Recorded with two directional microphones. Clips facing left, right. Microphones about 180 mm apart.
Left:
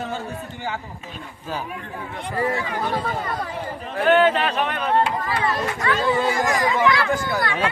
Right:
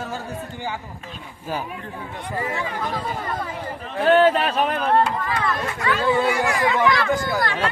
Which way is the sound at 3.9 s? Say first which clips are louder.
Right 1 dB; 35° right (ahead or behind).